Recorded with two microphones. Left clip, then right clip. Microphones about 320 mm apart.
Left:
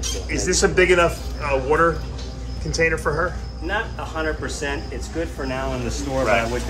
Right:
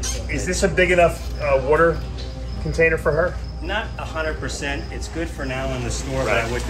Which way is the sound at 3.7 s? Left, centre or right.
Left.